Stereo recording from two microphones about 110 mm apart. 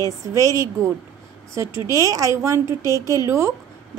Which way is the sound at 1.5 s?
25° right (ahead or behind).